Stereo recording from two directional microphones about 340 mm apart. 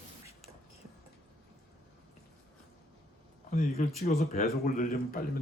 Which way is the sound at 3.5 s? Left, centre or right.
Left.